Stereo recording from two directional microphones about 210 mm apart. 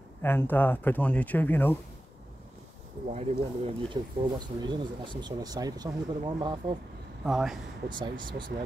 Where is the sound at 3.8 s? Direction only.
20° right (ahead or behind).